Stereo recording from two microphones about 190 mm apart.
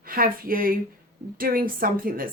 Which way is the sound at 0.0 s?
50° right (ahead or behind).